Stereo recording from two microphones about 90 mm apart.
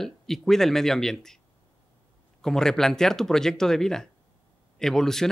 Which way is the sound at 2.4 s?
5° left (ahead or behind).